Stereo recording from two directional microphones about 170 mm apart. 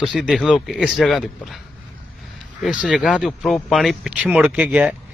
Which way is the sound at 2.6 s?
5° right (ahead or behind).